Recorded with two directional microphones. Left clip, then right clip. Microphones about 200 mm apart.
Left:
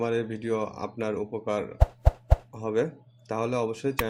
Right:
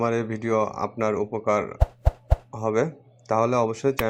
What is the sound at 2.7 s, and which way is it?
Speech, 15° right (ahead or behind).